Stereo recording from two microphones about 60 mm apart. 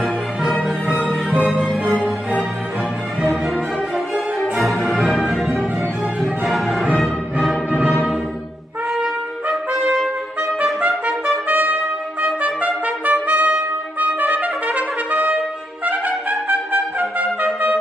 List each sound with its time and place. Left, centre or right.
0.0 s music: centre
3.3 s music: centre
6.2 s music: centre
7.9 s music: centre
9.0 s trumpet: centre
10.6 s music: right
11.2 s trumpet: right